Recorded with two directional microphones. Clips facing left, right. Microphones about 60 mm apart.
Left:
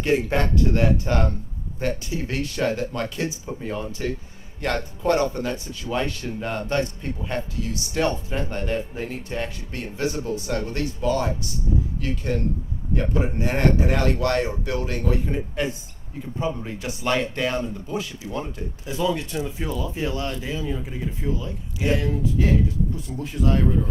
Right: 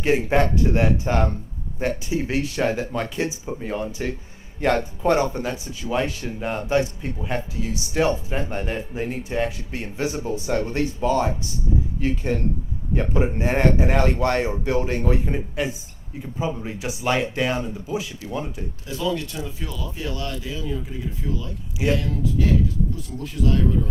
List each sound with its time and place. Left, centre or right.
0.0 s speech: centre
3.6 s speech: centre
15.5 s speech: centre
18.9 s speech: left